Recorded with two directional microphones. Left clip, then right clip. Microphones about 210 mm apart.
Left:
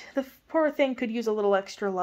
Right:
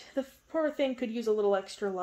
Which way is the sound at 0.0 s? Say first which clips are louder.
Left 4 dB; 25° left (ahead or behind).